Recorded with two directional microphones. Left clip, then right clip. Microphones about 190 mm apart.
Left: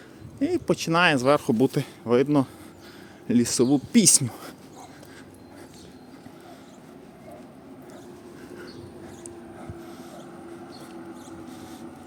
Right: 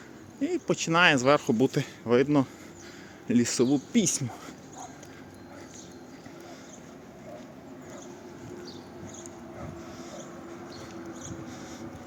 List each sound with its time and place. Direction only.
0.3 s speech: 25° left (ahead or behind)
3.9 s speech: 40° left (ahead or behind)
11.5 s mouse: 15° left (ahead or behind)